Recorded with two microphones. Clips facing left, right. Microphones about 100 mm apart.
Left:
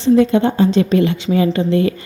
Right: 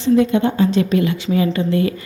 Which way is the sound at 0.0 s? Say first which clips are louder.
Left 2 dB; 35° left (ahead or behind).